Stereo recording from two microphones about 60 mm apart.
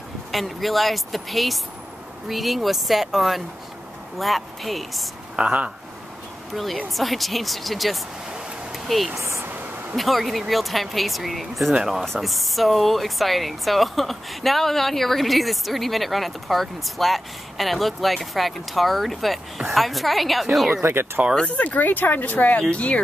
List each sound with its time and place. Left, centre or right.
0.3 s speech: centre
5.3 s speech: right
6.5 s speech: centre
8.7 s a sound: centre
9.1 s a sound: right
9.4 s a sound: right
9.9 s speech: centre
11.7 s speech: centre
12.0 s speech: centre
20.8 s speech: right
21.4 s speech: left